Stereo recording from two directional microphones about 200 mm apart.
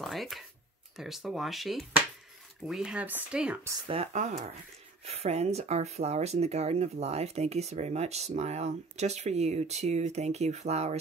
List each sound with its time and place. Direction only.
0.0 s speech: centre (ahead or behind)
3.8 s speech: 30° right (ahead or behind)